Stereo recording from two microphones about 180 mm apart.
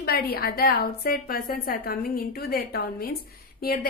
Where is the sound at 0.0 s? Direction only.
60° left (ahead or behind).